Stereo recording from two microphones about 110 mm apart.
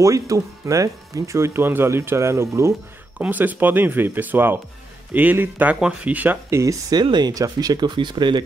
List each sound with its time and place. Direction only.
0.0 s speech: 30° right (ahead or behind)
3.2 s speech: 15° right (ahead or behind)
6.6 s speech: 30° right (ahead or behind)
7.0 s speech: 40° right (ahead or behind)